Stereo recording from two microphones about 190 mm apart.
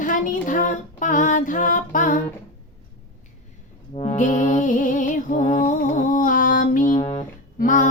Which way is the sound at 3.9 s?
30° left (ahead or behind).